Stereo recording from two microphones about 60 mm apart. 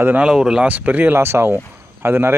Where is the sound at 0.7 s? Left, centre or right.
Right.